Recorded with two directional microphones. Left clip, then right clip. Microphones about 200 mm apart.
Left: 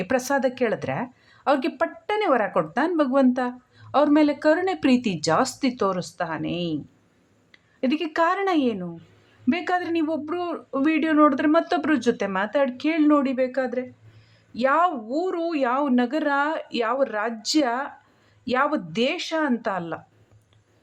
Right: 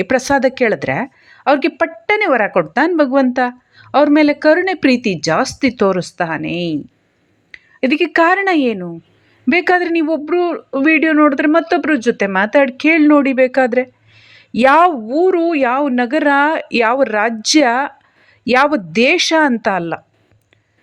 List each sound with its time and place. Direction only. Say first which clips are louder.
0.0 s speech: right 9 dB; 20° right (ahead or behind)